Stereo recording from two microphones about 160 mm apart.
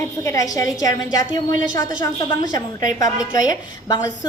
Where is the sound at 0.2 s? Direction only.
20° left (ahead or behind).